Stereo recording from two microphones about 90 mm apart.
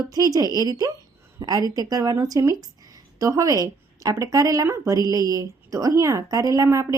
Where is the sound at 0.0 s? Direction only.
45° right (ahead or behind).